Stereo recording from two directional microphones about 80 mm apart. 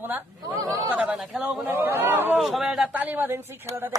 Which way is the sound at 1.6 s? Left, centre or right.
Right.